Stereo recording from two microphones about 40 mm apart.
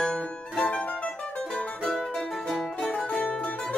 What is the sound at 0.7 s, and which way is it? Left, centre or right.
Mandolin, left.